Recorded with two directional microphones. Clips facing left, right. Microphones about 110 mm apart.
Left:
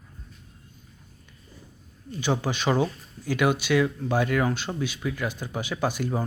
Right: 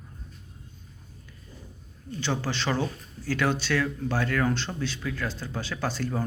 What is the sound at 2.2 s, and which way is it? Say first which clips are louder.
Speech: left 3 dB; 15° left (ahead or behind).